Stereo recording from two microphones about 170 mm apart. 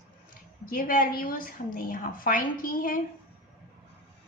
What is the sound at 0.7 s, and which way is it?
A woman's voice, 55° left (ahead or behind).